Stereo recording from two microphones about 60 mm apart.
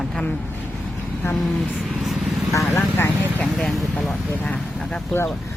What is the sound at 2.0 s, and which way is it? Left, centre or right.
Vehicle, centre.